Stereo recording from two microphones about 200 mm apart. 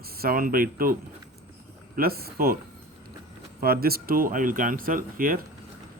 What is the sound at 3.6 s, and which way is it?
Speech, 50° right (ahead or behind).